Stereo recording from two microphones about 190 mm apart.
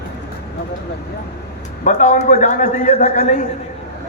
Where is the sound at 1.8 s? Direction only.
40° left (ahead or behind).